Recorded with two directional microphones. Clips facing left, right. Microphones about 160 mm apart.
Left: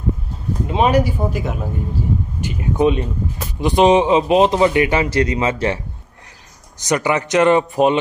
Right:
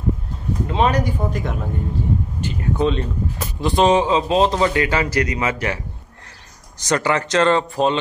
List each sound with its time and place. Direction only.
0.7 s a man's voice: 10° left (ahead or behind)
6.8 s a man's voice: 15° left (ahead or behind)